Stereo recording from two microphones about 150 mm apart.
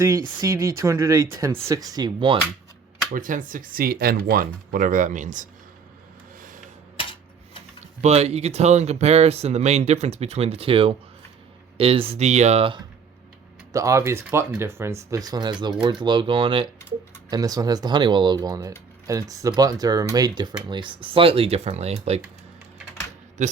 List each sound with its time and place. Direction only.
0.3 s speech: 20° right (ahead or behind)
3.1 s speech: 60° right (ahead or behind)
8.0 s speech: 45° right (ahead or behind)
13.7 s speech: 20° right (ahead or behind); by 16.6 s 35° right (ahead or behind)
17.2 s speech: 25° right (ahead or behind); by 22.2 s 45° right (ahead or behind)
23.4 s speech: 55° right (ahead or behind)